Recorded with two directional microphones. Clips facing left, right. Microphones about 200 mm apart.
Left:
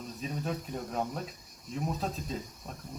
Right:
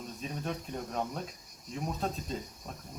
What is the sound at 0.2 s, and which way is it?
Speech, centre (ahead or behind).